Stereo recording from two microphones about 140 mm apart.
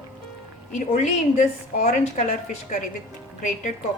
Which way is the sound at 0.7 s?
60° left (ahead or behind).